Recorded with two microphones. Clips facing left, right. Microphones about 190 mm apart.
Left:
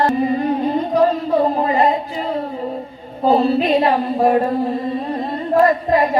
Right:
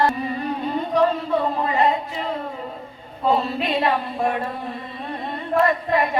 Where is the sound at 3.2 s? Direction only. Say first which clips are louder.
Left 7 dB; 35° left (ahead or behind).